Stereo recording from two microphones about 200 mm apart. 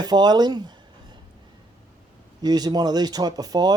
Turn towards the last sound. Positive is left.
turn(degrees=-20)  # may be behind; listen again after turning